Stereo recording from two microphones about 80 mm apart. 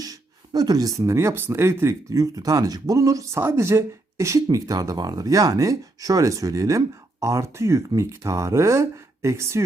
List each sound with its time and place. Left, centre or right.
0.0 s speech: right
3.4 s speech: right